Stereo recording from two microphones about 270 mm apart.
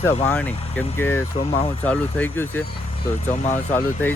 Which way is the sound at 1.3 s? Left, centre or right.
Left.